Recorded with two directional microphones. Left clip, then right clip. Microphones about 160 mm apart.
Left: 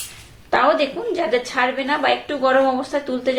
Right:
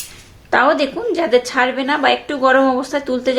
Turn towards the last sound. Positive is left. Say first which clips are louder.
# right 3 dB
turn(degrees=-35)  # may be behind; listen again after turning